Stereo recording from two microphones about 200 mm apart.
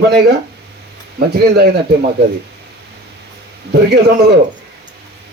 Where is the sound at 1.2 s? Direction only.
50° right (ahead or behind).